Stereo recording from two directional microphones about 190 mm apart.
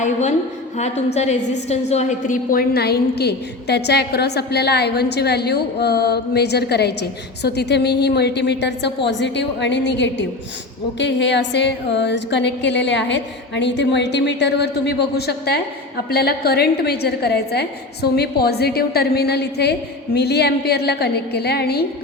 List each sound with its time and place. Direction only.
0.0 s a woman's voice: 35° left (ahead or behind); by 21.8 s 60° left (ahead or behind)